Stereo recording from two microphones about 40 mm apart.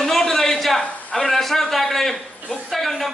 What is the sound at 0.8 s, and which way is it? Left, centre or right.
Speech, centre.